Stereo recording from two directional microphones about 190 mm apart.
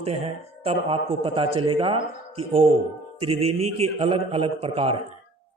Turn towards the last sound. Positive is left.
turn(degrees=-30)  # may be behind; listen again after turning